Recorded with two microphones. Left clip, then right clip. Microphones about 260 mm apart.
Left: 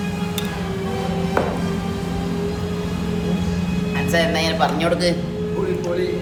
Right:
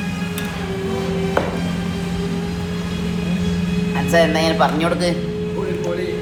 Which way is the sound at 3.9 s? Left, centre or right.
Centre.